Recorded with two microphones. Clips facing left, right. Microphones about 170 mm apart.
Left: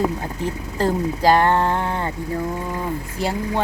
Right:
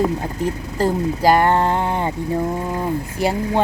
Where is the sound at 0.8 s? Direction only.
10° right (ahead or behind).